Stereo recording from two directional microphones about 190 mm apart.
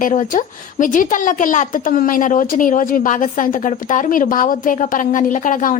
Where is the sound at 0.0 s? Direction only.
40° left (ahead or behind).